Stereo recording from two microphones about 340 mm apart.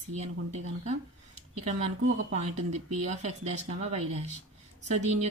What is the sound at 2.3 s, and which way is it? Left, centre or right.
Speech, centre.